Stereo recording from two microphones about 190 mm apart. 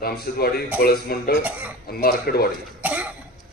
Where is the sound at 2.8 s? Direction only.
10° right (ahead or behind).